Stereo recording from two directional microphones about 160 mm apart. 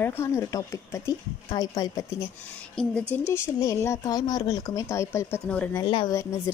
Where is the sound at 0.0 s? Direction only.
15° left (ahead or behind).